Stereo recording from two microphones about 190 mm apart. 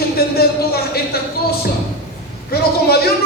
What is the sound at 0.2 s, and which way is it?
Speech, 55° left (ahead or behind).